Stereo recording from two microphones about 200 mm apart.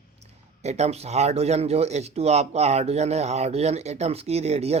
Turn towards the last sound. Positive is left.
turn(degrees=-30)  # may be behind; listen again after turning